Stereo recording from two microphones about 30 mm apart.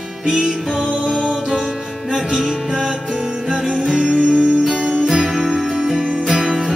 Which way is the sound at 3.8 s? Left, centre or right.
Centre.